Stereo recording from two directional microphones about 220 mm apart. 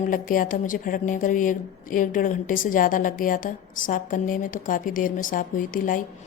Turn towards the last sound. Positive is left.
turn(degrees=40)  # may be behind; listen again after turning